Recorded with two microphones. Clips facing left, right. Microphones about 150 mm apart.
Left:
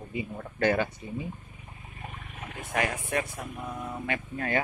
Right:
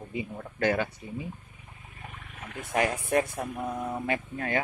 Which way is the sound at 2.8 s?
35° right (ahead or behind).